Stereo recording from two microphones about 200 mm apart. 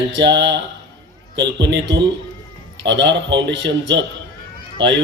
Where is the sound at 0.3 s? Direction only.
60° right (ahead or behind).